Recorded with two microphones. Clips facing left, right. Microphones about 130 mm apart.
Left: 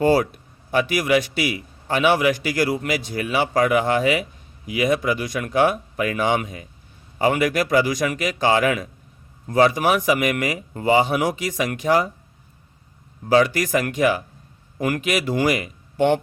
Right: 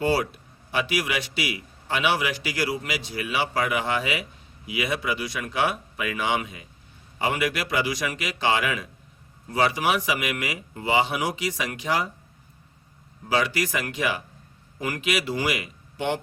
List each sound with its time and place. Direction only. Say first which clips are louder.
0.0 s a man's voice: left 6 dB; 50° left (ahead or behind)
13.2 s a man's voice: left 7 dB; 45° left (ahead or behind)